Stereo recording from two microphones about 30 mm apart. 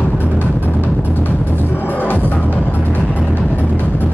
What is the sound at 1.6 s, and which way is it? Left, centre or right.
Music, left.